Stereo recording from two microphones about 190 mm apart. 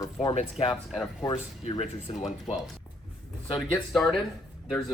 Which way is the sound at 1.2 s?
20° left (ahead or behind).